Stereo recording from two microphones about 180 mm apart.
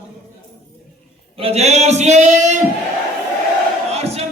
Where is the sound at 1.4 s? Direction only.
35° right (ahead or behind).